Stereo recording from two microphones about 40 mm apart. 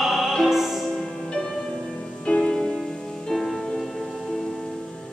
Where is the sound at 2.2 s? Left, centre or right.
Left.